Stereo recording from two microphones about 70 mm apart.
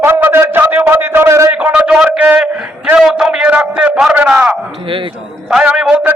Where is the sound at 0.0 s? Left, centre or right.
Right; by 4.5 s centre.